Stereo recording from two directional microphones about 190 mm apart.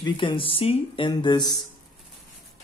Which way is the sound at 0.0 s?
25° left (ahead or behind).